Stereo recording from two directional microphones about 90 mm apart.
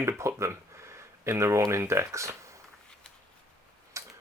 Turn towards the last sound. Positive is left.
turn(degrees=-35)  # may be behind; listen again after turning